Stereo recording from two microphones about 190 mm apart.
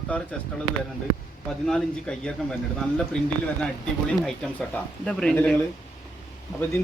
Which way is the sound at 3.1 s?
5° left (ahead or behind).